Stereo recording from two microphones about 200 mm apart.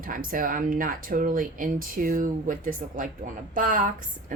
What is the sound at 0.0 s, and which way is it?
A woman's voice, 45° right (ahead or behind).